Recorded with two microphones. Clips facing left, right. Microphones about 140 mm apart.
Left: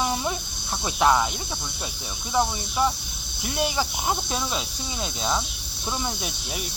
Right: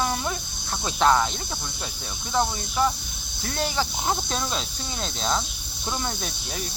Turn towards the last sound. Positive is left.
turn(degrees=10)  # may be behind; listen again after turning